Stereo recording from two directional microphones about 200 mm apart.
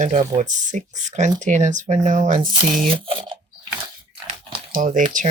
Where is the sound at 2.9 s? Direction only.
25° right (ahead or behind).